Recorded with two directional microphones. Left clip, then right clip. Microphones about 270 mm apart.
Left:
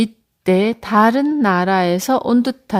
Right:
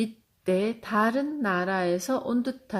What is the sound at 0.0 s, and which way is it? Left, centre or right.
Speech, left.